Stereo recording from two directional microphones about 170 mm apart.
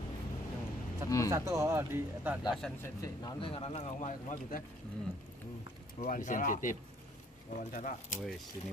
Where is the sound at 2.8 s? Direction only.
20° left (ahead or behind).